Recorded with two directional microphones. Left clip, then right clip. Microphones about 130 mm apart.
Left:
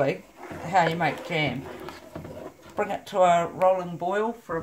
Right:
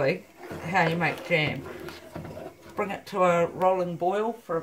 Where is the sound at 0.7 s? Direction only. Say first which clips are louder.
Left 2 dB; 25° left (ahead or behind).